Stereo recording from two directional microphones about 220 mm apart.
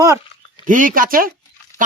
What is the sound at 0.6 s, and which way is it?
Speech, 35° right (ahead or behind).